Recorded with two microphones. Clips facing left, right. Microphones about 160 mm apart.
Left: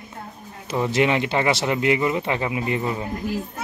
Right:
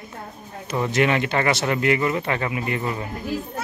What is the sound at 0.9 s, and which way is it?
Speech, 20° left (ahead or behind).